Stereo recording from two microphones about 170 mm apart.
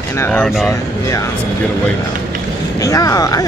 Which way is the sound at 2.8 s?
20° left (ahead or behind).